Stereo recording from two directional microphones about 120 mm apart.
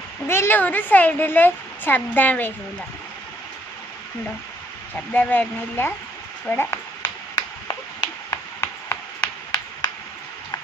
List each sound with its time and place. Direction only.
0.3 s a woman's voice: 20° left (ahead or behind)
4.9 s a woman's voice: 15° left (ahead or behind)
7.0 s a sound: 35° left (ahead or behind)